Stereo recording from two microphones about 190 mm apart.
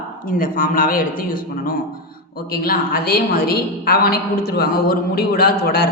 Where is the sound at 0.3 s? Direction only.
45° left (ahead or behind).